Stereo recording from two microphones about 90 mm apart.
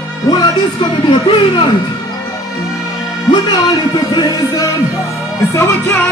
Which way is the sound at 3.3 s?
50° left (ahead or behind).